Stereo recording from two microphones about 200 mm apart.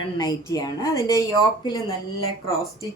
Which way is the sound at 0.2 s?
20° left (ahead or behind).